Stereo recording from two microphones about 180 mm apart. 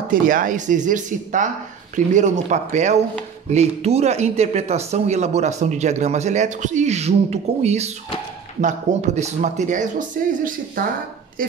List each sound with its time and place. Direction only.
0.1 s speech: 50° right (ahead or behind)